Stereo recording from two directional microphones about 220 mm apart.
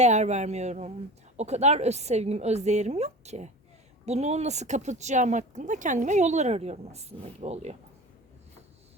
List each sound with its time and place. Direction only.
0.0 s a woman's voice: 30° right (ahead or behind)